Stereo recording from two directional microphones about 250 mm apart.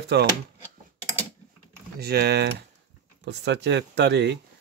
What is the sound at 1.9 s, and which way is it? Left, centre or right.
Speech, right.